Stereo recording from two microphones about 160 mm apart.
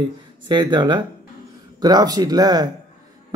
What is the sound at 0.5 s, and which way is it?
Speech, 25° right (ahead or behind).